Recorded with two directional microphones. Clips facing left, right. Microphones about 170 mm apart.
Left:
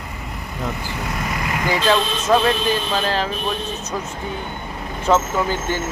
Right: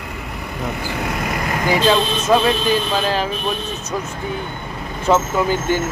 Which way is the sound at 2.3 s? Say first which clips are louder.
Right 1 dB; 10° right (ahead or behind).